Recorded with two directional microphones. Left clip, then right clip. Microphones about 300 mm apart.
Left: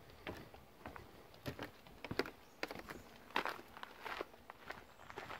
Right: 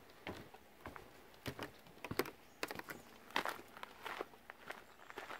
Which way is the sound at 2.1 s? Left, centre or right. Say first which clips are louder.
Even; centre.